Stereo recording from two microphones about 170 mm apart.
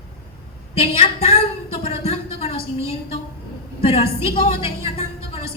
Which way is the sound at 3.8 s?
35° left (ahead or behind).